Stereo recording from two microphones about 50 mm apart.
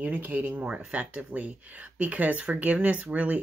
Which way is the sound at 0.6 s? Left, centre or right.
Right.